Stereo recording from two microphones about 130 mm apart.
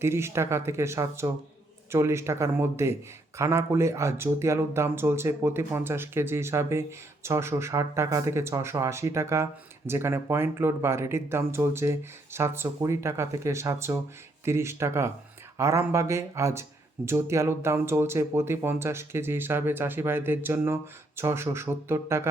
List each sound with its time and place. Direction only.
0.0 s a man's voice: 20° right (ahead or behind)